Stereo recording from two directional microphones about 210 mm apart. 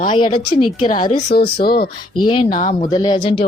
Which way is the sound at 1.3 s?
50° left (ahead or behind).